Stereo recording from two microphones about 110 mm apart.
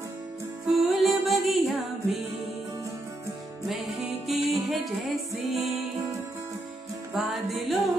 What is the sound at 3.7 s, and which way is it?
Music, centre (ahead or behind).